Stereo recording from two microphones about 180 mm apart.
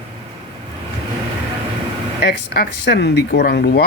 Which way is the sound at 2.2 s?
65° left (ahead or behind).